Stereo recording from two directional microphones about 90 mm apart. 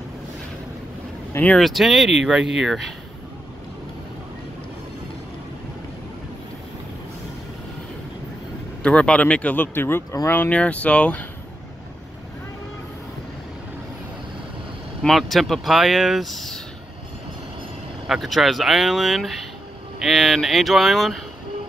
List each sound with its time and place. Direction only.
1.3 s speech: 20° left (ahead or behind)
1.6 s speech: centre (ahead or behind)
8.8 s speech: 10° left (ahead or behind)
15.0 s speech: centre (ahead or behind)
18.0 s speech: centre (ahead or behind)